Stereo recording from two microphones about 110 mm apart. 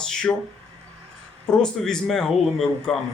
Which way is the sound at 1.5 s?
5° left (ahead or behind).